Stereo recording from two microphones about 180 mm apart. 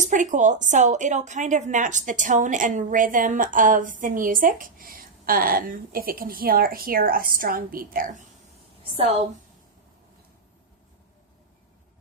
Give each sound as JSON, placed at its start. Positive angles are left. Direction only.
{"t": 0.0, "sound": "a woman's voice", "side_deg": -45}